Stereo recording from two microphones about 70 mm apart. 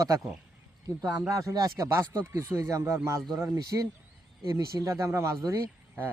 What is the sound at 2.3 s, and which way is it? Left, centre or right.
Speech, right.